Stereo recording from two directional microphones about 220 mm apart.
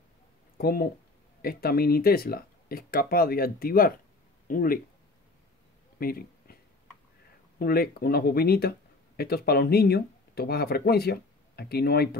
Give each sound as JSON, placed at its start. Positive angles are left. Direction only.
{"t": 0.6, "sound": "speech", "side_deg": 45}
{"t": 5.9, "sound": "a sound", "side_deg": 45}
{"t": 7.5, "sound": "speech", "side_deg": 45}